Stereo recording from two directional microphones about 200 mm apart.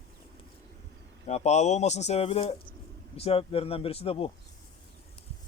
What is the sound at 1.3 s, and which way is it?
Speech, 35° left (ahead or behind).